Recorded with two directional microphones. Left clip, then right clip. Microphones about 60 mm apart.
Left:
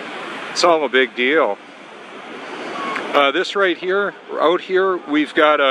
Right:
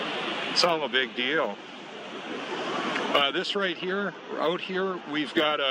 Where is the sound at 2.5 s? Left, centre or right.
Left.